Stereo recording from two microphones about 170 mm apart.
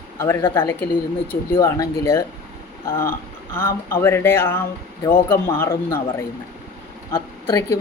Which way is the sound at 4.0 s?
15° left (ahead or behind).